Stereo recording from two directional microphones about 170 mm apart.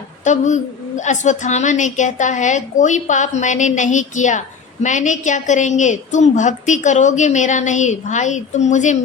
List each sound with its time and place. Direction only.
0.3 s a woman's voice: 45° left (ahead or behind)